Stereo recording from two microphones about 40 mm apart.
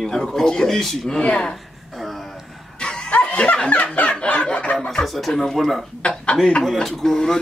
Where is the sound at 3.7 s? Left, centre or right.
Left.